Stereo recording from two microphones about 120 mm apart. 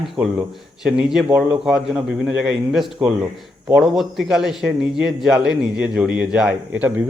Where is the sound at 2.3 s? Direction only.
5° right (ahead or behind).